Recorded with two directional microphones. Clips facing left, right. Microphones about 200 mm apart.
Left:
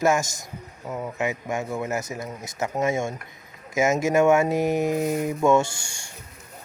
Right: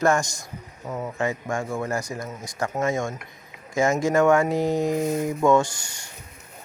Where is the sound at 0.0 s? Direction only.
5° left (ahead or behind).